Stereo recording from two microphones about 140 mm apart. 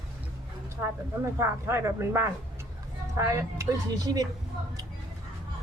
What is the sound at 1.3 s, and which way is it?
Speech, 20° right (ahead or behind).